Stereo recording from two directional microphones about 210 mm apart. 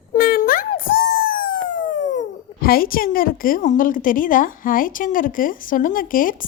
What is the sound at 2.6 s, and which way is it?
A woman's voice, 45° left (ahead or behind).